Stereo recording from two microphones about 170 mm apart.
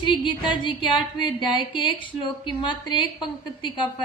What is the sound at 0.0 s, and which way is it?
A woman's voice, 30° left (ahead or behind).